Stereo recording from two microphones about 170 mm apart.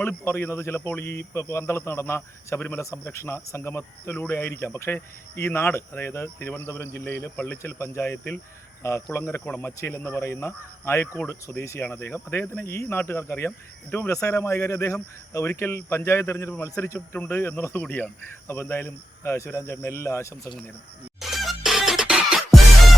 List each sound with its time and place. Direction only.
0.0 s a man's voice: 10° left (ahead or behind)
21.2 s music: centre (ahead or behind)